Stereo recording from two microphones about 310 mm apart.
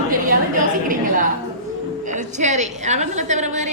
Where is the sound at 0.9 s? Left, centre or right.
Right.